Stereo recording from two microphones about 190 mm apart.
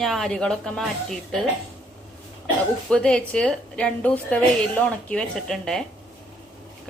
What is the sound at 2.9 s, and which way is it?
A woman's voice, 5° left (ahead or behind).